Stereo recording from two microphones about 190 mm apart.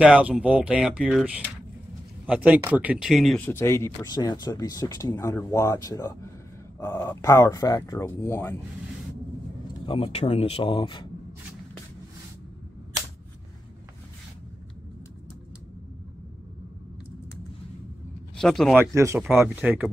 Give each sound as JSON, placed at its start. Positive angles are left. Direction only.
{"t": 0.0, "sound": "speech", "side_deg": -5}
{"t": 3.4, "sound": "speech", "side_deg": 15}
{"t": 9.8, "sound": "speech", "side_deg": 30}
{"t": 18.3, "sound": "speech", "side_deg": 0}
{"t": 18.8, "sound": "speech", "side_deg": -15}